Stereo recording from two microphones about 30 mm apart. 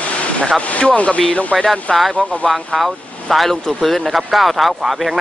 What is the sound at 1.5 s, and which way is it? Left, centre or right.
Speech, left.